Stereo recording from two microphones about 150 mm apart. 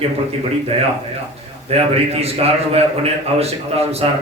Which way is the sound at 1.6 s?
40° right (ahead or behind).